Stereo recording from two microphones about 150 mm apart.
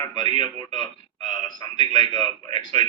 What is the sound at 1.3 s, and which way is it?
Speech, 30° left (ahead or behind).